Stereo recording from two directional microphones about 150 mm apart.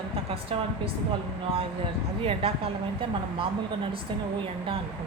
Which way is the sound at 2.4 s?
40° right (ahead or behind).